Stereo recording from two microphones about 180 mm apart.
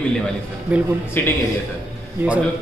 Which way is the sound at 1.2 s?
10° left (ahead or behind).